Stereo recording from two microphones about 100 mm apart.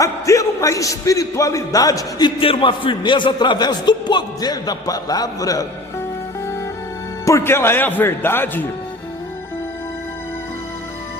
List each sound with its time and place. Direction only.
0.0 s a man's voice: 35° left (ahead or behind)
2.4 s a man's voice: 60° left (ahead or behind); by 5.6 s 35° left (ahead or behind)
7.3 s speech: 25° left (ahead or behind)